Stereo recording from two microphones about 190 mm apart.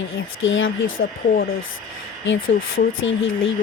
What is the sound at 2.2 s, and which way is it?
Speech, 80° left.